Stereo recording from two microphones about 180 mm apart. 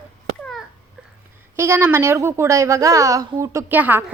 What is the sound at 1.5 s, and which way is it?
A woman's voice, 15° right (ahead or behind).